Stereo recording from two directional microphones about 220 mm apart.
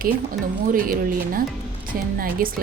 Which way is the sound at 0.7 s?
40° right (ahead or behind).